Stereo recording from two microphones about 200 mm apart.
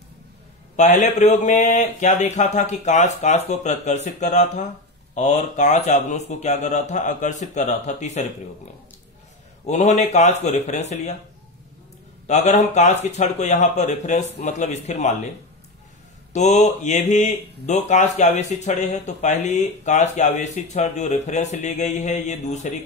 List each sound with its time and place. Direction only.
0.7 s speech: 40° left (ahead or behind)
9.7 s speech: 35° left (ahead or behind)
12.3 s speech: 35° left (ahead or behind)
16.3 s speech: 35° left (ahead or behind)